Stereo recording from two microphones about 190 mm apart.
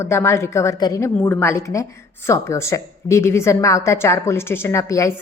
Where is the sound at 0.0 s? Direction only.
15° left (ahead or behind).